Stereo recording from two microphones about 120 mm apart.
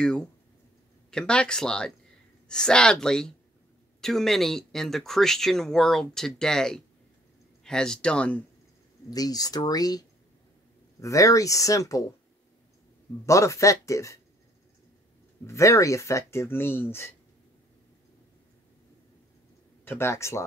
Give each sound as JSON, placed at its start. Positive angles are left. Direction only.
{"t": 0.0, "sound": "speech", "side_deg": 5}
{"t": 9.1, "sound": "speech", "side_deg": 30}
{"t": 13.2, "sound": "speech", "side_deg": 25}
{"t": 15.4, "sound": "speech", "side_deg": 25}
{"t": 19.8, "sound": "speech", "side_deg": 20}